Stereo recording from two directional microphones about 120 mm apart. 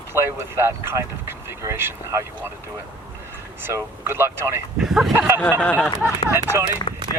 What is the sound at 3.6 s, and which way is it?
Speech, 20° right (ahead or behind).